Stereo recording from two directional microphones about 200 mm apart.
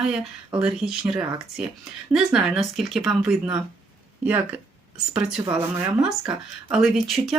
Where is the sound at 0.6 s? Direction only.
5° right (ahead or behind).